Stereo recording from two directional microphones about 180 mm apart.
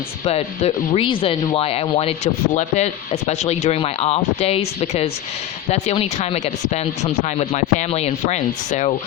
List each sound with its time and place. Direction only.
0.3 s speech: 35° left (ahead or behind)